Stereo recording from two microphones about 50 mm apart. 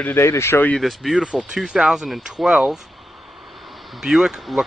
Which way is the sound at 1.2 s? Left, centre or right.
Right.